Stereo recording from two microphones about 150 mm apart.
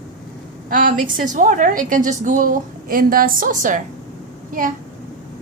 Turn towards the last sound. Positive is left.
turn(degrees=-65)  # may be behind; listen again after turning